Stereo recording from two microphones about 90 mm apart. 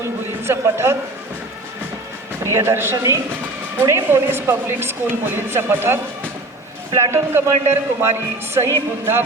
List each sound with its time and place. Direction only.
0.4 s a man's voice: 30° right (ahead or behind)
2.4 s a man's voice: 30° right (ahead or behind)